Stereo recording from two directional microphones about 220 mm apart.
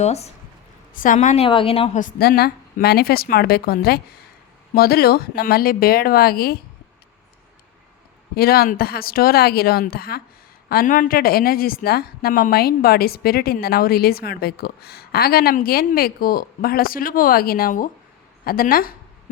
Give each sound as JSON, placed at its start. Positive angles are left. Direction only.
{"t": 0.0, "sound": "a woman's voice", "side_deg": 30}
{"t": 8.4, "sound": "a woman's voice", "side_deg": 45}